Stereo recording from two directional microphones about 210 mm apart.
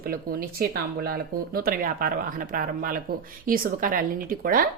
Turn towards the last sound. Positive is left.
turn(degrees=-40)  # may be behind; listen again after turning